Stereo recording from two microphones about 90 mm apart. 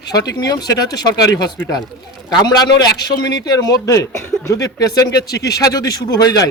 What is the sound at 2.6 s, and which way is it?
Speech, 50° left (ahead or behind).